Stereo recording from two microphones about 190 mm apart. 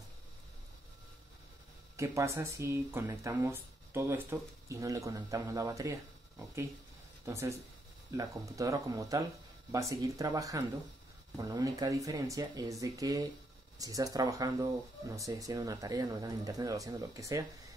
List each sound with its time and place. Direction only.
2.0 s speech: 15° right (ahead or behind)
7.2 s speech: 15° right (ahead or behind)